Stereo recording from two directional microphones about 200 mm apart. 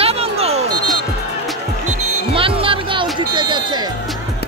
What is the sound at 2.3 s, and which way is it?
Music, 25° right (ahead or behind).